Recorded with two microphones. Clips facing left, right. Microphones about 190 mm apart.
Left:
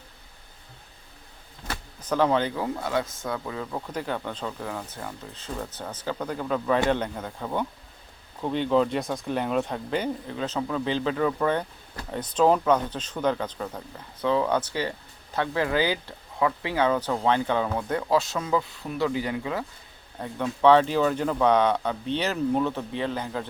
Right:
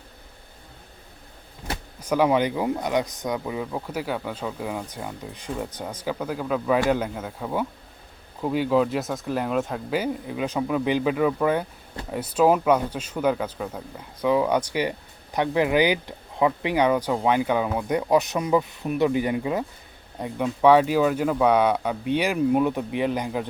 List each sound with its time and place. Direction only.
2.0 s speech: 10° right (ahead or behind)